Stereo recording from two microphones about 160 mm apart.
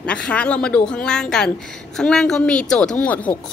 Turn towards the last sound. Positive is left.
turn(degrees=10)  # may be behind; listen again after turning